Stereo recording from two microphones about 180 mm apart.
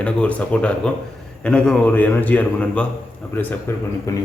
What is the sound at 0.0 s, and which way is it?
Speech, 5° left (ahead or behind).